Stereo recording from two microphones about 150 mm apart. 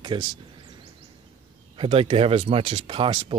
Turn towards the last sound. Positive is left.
turn(degrees=-35)  # may be behind; listen again after turning